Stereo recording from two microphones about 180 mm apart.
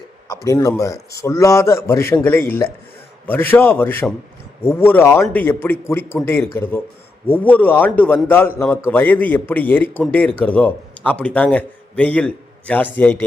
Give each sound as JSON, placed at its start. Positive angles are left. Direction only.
{"t": 0.4, "sound": "a man's voice", "side_deg": 15}